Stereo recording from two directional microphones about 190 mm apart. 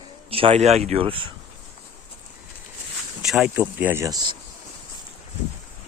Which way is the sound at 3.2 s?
5° right (ahead or behind).